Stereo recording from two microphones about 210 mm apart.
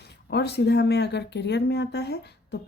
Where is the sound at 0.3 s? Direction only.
50° left (ahead or behind).